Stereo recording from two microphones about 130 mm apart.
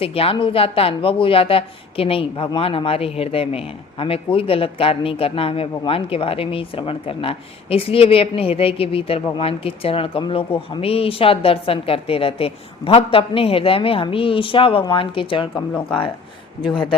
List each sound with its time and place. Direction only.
0.0 s a man's voice: 45° left (ahead or behind)